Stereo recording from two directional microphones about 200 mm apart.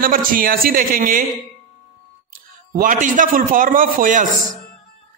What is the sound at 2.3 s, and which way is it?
A man's voice, 40° right (ahead or behind).